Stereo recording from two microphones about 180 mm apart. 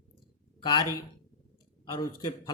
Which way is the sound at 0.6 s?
25° left (ahead or behind).